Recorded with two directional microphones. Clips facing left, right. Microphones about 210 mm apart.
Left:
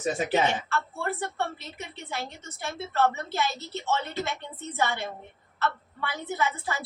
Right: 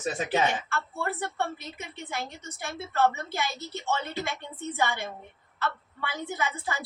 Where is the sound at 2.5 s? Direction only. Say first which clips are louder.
Left 2 dB; 15° right (ahead or behind).